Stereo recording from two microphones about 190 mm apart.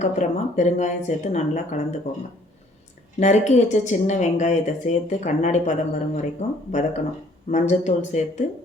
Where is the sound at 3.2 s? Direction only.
35° left (ahead or behind).